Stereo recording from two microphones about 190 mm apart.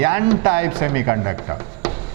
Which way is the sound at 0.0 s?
10° right (ahead or behind).